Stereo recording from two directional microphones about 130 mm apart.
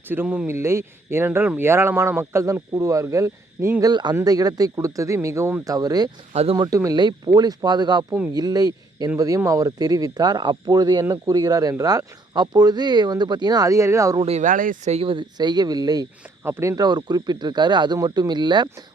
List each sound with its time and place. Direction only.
0.1 s speech: 15° right (ahead or behind); by 6.1 s 30° right (ahead or behind)
6.3 s speech: 50° right (ahead or behind)
6.6 s speech: 25° right (ahead or behind)
14.3 s speech: 70° right (ahead or behind); by 14.9 s 90° right
14.9 s speech: 40° right (ahead or behind)
16.4 s speech: 20° right (ahead or behind); by 18.7 s 35° right (ahead or behind)